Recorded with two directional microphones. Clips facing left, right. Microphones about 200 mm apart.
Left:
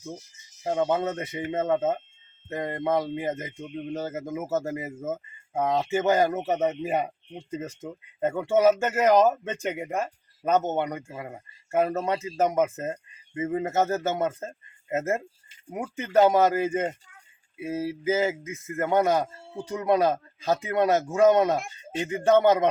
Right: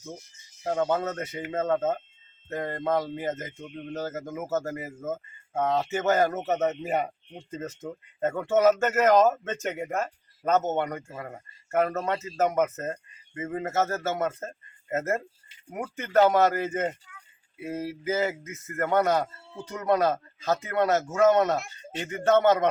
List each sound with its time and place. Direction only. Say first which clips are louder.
0.6 s speech: left 1 dB; 10° left (ahead or behind)